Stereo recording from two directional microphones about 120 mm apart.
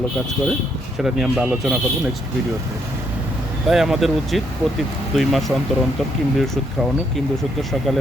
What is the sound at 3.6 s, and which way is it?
Speech, centre (ahead or behind).